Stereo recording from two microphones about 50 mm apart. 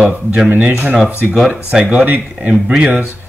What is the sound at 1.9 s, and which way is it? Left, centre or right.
A man's voice, right.